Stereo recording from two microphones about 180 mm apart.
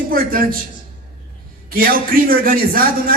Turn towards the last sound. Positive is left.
turn(degrees=-55)  # may be behind; listen again after turning